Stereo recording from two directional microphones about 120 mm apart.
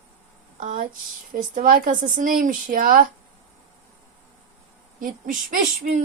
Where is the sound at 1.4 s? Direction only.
90° right.